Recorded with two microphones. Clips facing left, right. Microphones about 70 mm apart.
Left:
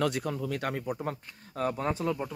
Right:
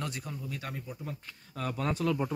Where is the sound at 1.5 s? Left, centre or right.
Left.